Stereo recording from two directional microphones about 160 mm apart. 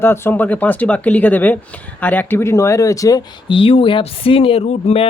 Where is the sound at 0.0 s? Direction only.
15° left (ahead or behind).